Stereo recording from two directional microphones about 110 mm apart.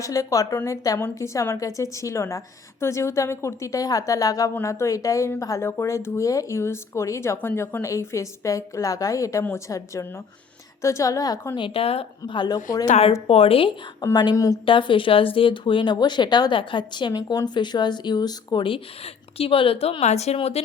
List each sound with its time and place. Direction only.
0.0 s a woman's voice: 30° left (ahead or behind); by 12.0 s 60° left (ahead or behind)
12.3 s a woman's voice: 40° left (ahead or behind)
12.9 s speech: 65° left (ahead or behind)
14.0 s a woman's voice: 35° left (ahead or behind)
14.6 s speech: 50° left (ahead or behind)
17.1 s speech: 35° left (ahead or behind); by 20.6 s 70° left (ahead or behind)